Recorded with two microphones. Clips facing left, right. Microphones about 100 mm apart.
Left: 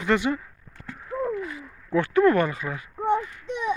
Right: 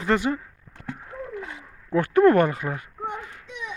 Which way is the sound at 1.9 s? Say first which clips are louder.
Right 2 dB; 50° right (ahead or behind).